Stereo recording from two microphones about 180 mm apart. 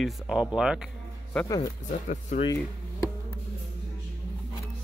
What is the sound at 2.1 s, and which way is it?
Speech, 40° left (ahead or behind).